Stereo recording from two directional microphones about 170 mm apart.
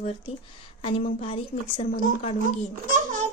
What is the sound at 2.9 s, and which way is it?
Babbling, 50° right (ahead or behind).